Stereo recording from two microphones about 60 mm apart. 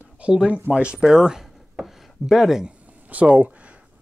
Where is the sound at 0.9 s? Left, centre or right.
Centre.